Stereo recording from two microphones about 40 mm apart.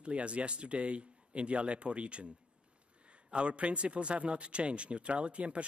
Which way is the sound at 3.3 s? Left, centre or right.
Right.